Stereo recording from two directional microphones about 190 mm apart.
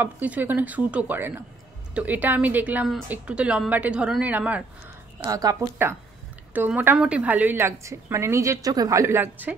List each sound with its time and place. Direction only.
0.0 s a woman's voice: 10° right (ahead or behind)
5.2 s a woman's voice: 20° right (ahead or behind)